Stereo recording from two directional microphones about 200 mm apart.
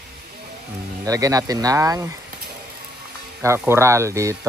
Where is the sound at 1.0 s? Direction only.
15° right (ahead or behind).